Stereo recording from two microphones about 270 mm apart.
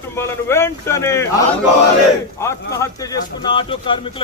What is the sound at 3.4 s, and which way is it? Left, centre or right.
Speech, centre.